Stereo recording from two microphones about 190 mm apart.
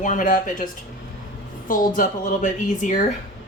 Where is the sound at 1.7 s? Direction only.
45° left (ahead or behind).